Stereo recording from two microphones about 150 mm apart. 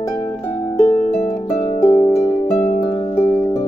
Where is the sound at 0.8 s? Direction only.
45° left (ahead or behind).